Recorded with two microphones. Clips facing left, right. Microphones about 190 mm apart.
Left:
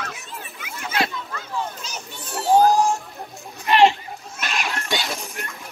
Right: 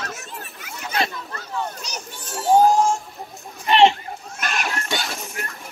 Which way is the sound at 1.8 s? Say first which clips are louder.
Right 1 dB; centre (ahead or behind).